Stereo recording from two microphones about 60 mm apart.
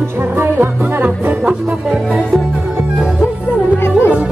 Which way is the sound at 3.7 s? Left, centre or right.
Left.